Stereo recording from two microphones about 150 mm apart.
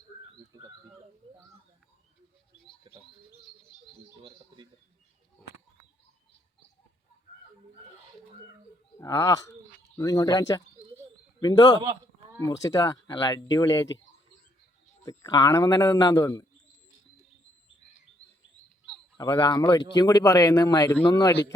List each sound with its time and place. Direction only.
4.2 s a sound: 30° right (ahead or behind)
9.0 s a man's voice: 20° left (ahead or behind)
15.0 s a man's voice: 25° left (ahead or behind)
19.1 s a man's voice: 25° left (ahead or behind)